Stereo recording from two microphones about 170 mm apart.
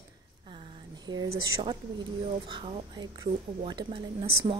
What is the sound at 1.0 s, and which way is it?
Speech, 25° right (ahead or behind).